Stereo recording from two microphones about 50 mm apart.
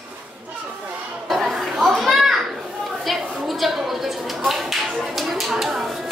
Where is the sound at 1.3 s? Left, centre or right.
Centre.